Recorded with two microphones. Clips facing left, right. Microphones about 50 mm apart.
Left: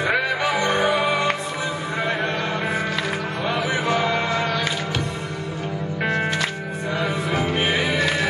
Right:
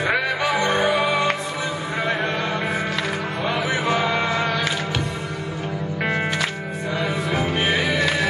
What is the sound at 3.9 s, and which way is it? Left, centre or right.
Mantra, right.